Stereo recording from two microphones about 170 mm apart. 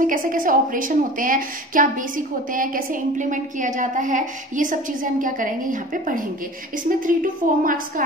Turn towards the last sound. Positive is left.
turn(degrees=-55)  # may be behind; listen again after turning